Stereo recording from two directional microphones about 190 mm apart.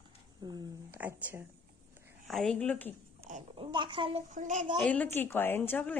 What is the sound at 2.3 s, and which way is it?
Speech, 5° left (ahead or behind).